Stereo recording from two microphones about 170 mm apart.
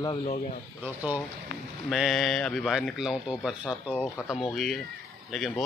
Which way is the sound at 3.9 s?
10° left (ahead or behind).